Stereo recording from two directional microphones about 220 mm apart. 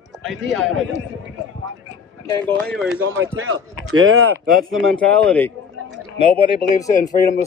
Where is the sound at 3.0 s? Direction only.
60° right (ahead or behind).